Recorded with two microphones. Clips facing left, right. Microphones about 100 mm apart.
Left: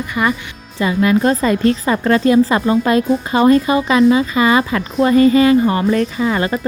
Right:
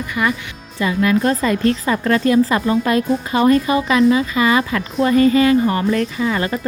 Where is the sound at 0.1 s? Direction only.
30° left (ahead or behind).